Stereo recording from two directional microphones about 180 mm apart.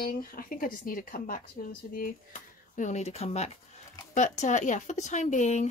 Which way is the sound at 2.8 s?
40° left (ahead or behind).